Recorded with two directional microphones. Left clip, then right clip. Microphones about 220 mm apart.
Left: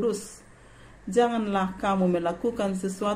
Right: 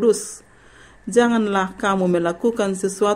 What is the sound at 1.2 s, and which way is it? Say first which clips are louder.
Speech: right 6 dB; 50° right (ahead or behind).